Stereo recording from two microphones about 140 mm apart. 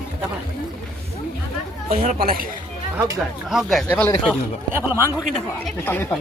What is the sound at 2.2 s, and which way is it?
Speech, 90° right.